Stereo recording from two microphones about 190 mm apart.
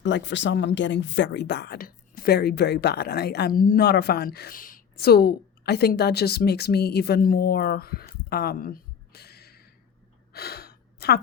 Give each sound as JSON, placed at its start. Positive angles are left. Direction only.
{"t": 0.0, "sound": "a woman's voice", "side_deg": 70}
{"t": 10.3, "sound": "gasp", "side_deg": 55}